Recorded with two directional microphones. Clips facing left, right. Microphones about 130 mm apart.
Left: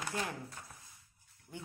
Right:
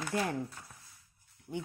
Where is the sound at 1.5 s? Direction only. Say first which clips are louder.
Right 9 dB; 75° right (ahead or behind).